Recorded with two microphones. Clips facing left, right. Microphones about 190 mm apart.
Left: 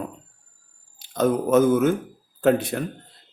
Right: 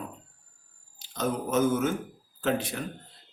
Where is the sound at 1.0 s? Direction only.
55° left (ahead or behind).